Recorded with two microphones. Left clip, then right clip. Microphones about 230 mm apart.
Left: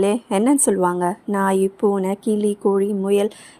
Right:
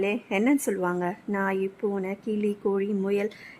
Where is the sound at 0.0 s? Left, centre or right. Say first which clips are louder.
Left 7 dB; centre.